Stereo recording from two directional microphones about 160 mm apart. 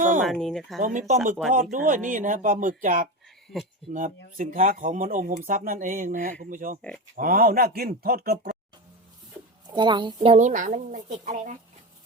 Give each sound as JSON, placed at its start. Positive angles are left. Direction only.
{"t": 0.2, "sound": "speech", "side_deg": 0}
{"t": 0.8, "sound": "speech", "side_deg": -55}
{"t": 7.2, "sound": "speech", "side_deg": -65}
{"t": 9.6, "sound": "speech", "side_deg": -30}
{"t": 10.3, "sound": "speech", "side_deg": -50}